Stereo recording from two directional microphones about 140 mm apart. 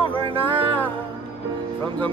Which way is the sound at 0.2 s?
40° right (ahead or behind).